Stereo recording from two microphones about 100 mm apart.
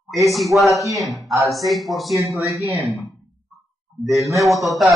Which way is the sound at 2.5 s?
30° right (ahead or behind).